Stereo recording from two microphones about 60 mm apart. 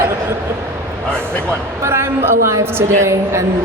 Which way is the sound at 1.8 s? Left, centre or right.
Right.